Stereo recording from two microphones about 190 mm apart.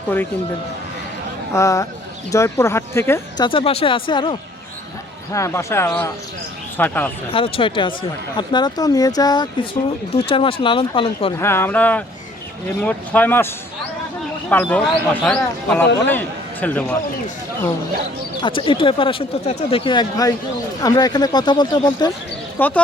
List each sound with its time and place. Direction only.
1.5 s speech: 15° left (ahead or behind)
5.3 s speech: 15° left (ahead or behind)
7.3 s speech: 30° left (ahead or behind)
11.3 s speech: 15° left (ahead or behind)
14.5 s a man's voice: 5° left (ahead or behind)
18.4 s speech: 25° left (ahead or behind)
22.5 s speech: 10° left (ahead or behind)